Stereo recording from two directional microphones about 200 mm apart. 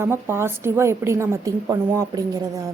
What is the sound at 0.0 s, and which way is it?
A woman's voice, 10° right (ahead or behind).